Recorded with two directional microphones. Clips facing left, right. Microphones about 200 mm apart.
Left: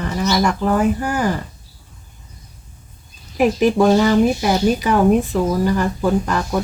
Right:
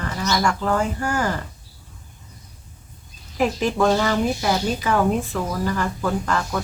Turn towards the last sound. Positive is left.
turn(degrees=15)  # may be behind; listen again after turning